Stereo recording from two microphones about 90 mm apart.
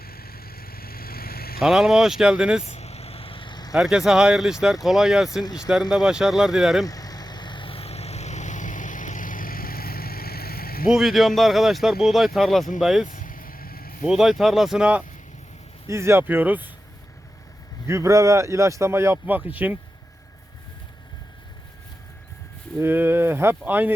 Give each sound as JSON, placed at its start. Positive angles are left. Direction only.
{"t": 1.6, "sound": "speech", "side_deg": -5}
{"t": 3.1, "sound": "vehicle", "side_deg": 90}
{"t": 3.7, "sound": "speech", "side_deg": -5}
{"t": 5.4, "sound": "speech", "side_deg": 50}
{"t": 5.9, "sound": "speech", "side_deg": -5}
{"t": 6.8, "sound": "vehicle", "side_deg": 45}
{"t": 10.8, "sound": "speech", "side_deg": -5}
{"t": 15.9, "sound": "speech", "side_deg": -30}
{"t": 17.8, "sound": "speech", "side_deg": -35}
{"t": 22.8, "sound": "speech", "side_deg": -25}